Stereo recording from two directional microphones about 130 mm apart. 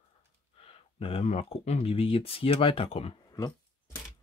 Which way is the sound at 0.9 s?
50° left (ahead or behind).